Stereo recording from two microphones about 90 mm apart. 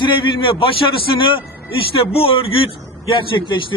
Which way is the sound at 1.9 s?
90° left.